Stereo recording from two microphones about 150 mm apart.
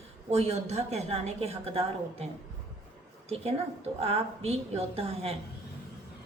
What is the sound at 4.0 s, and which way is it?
A woman's voice, 40° right (ahead or behind).